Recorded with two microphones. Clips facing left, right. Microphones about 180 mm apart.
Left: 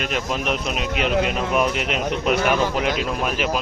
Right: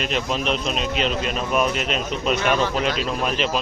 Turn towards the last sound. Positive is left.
turn(degrees=10)  # may be behind; listen again after turning